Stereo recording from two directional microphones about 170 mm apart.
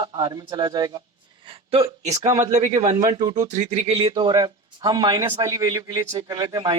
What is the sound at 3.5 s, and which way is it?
Speech, 45° right (ahead or behind).